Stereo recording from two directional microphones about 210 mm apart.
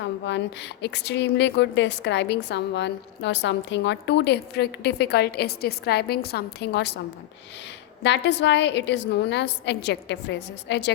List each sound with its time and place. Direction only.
0.0 s a woman's voice: 60° left (ahead or behind)
8.0 s a woman's voice: 55° left (ahead or behind)